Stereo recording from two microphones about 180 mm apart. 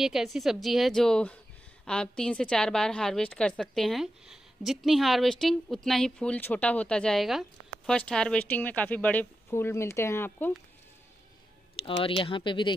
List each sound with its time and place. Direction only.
0.0 s a woman's voice: centre (ahead or behind)
11.8 s speech: 30° left (ahead or behind)